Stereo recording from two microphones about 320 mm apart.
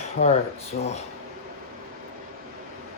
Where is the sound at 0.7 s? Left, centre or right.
Left.